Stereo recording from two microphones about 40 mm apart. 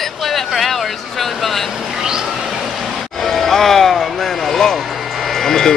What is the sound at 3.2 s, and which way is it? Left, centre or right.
Speech, centre.